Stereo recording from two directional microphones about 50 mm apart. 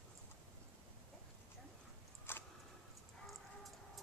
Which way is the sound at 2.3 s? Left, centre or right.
Left.